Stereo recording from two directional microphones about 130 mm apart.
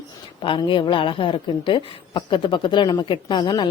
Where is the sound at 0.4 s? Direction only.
40° left (ahead or behind).